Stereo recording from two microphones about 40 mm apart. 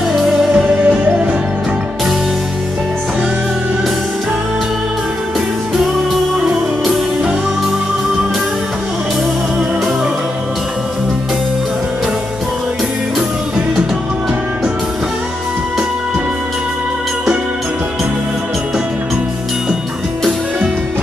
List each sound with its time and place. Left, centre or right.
0.1 s music: centre
0.7 s music: right